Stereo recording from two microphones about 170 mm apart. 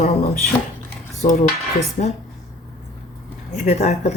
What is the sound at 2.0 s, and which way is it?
Speech, 50° left (ahead or behind).